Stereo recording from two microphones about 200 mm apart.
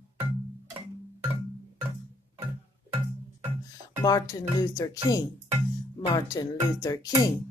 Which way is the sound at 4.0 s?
20° left (ahead or behind).